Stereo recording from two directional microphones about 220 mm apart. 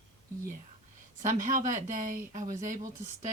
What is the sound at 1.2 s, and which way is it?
Speech, 35° right (ahead or behind).